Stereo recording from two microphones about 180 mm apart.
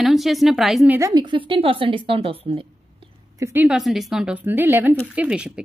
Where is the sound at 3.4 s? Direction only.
10° right (ahead or behind).